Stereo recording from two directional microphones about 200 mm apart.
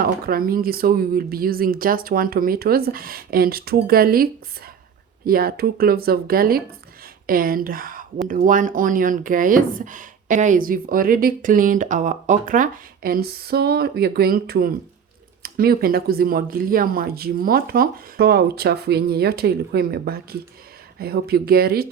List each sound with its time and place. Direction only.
0.0 s speech: 45° right (ahead or behind)